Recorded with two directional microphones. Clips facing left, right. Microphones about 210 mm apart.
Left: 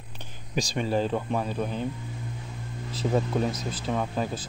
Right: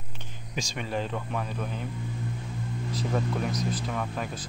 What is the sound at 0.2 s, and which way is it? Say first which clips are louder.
Speech: left 5 dB; 35° left (ahead or behind).